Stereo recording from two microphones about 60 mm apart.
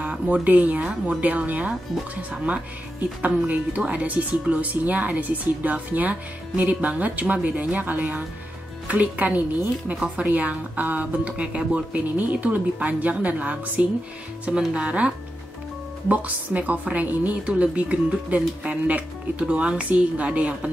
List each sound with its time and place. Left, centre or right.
0.0 s speech: right